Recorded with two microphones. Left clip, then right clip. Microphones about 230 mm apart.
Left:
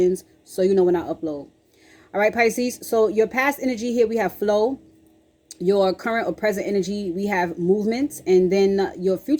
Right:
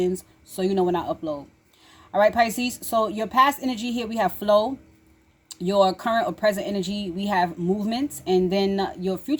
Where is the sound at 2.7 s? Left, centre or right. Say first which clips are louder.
Left 3 dB; centre.